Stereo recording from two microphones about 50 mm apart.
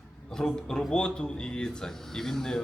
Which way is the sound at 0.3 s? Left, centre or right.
Centre.